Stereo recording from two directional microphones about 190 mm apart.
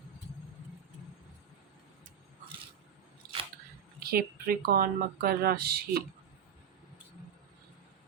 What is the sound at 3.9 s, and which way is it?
Speech, 50° right (ahead or behind).